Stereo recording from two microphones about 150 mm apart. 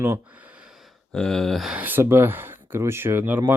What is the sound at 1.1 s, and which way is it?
Speech, 5° left (ahead or behind).